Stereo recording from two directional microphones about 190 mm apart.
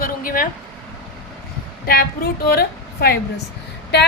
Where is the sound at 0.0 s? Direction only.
45° left (ahead or behind).